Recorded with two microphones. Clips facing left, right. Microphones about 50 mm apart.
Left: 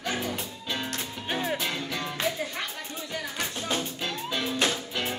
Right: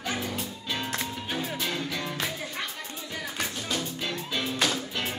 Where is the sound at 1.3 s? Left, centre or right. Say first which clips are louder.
Left 4 dB; left.